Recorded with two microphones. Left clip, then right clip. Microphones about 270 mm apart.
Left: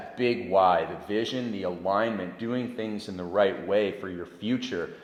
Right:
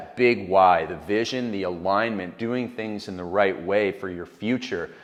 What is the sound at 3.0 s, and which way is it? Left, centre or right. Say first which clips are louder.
Speech: right 2 dB; right.